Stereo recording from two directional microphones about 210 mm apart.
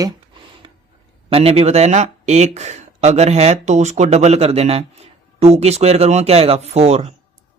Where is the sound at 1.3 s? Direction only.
30° right (ahead or behind).